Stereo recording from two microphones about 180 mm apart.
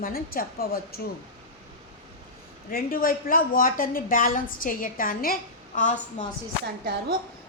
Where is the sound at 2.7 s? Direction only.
50° left (ahead or behind).